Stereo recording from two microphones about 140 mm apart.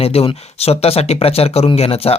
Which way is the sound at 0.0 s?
45° left (ahead or behind).